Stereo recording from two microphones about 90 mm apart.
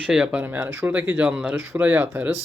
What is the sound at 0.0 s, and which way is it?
Speech, 10° right (ahead or behind).